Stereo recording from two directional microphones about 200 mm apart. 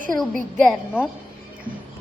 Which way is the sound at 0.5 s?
5° left (ahead or behind).